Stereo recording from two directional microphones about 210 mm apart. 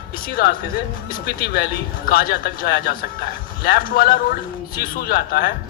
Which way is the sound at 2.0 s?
45° left (ahead or behind).